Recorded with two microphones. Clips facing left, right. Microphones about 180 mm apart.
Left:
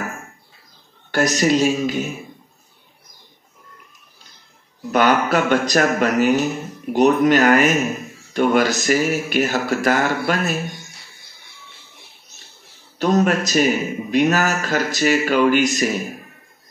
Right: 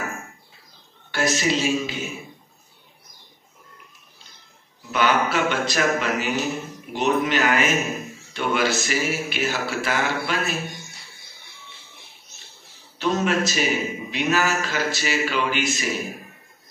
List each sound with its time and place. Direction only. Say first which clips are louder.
1.1 s a man's voice: left 6 dB; 45° left (ahead or behind)
4.9 s a man's voice: left 5 dB; 45° left (ahead or behind)
13.0 s a man's voice: left 5 dB; 45° left (ahead or behind)